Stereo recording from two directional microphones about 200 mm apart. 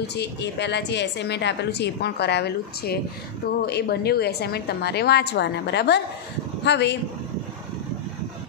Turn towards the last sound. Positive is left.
turn(degrees=60)  # may be behind; listen again after turning